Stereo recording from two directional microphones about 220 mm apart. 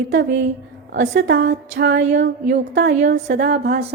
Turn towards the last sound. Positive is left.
turn(degrees=-45)  # may be behind; listen again after turning